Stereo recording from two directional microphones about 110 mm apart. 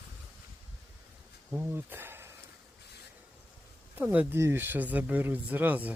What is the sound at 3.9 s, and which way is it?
Speech, 15° right (ahead or behind).